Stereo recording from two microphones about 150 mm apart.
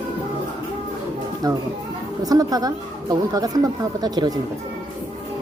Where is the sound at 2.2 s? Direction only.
25° right (ahead or behind).